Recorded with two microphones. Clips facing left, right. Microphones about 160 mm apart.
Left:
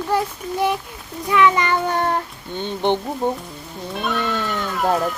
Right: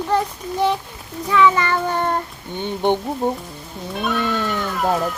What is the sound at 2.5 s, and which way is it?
Speech, 15° right (ahead or behind).